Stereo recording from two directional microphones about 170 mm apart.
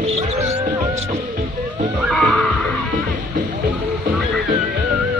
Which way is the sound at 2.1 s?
5° left (ahead or behind).